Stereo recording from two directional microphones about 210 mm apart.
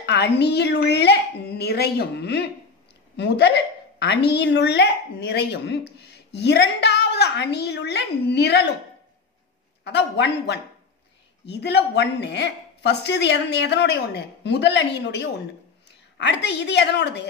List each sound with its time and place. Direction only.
0.0 s a woman's voice: 55° left (ahead or behind)
9.8 s a woman's voice: 55° left (ahead or behind)